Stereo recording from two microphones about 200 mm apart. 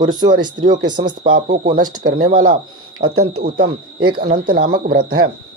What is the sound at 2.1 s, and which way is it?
Speech, 45° right (ahead or behind).